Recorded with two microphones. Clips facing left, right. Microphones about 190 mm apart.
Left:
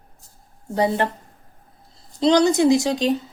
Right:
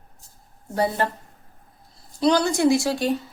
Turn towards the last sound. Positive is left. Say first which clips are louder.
# left 2 dB
turn(degrees=20)  # may be behind; listen again after turning